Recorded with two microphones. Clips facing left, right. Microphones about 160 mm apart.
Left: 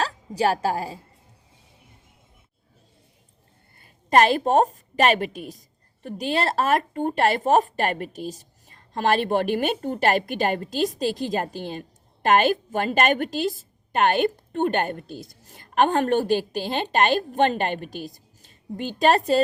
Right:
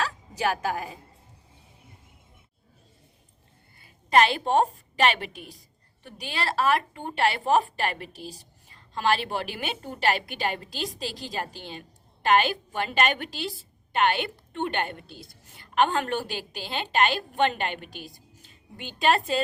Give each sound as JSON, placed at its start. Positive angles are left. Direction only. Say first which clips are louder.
{"t": 0.0, "sound": "a woman's voice", "louder": "left 5 dB", "side_deg": 35}
{"t": 3.8, "sound": "a woman's voice", "louder": "left 3 dB", "side_deg": 45}